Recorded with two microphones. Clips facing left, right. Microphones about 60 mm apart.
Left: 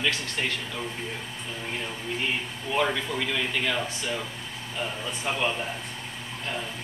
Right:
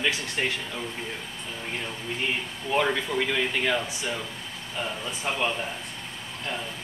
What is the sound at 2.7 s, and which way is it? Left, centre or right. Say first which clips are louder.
Speech: right 2 dB; centre.